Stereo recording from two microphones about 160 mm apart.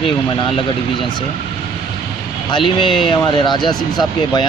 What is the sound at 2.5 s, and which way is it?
Speech, 30° left (ahead or behind).